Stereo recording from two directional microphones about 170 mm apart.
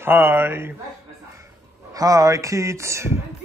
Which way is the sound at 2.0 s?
20° right (ahead or behind).